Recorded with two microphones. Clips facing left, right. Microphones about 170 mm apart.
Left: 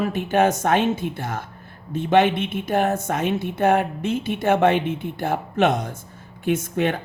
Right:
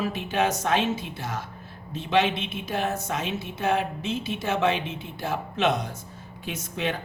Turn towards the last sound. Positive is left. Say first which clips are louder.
# left 8 dB
turn(degrees=50)  # may be behind; listen again after turning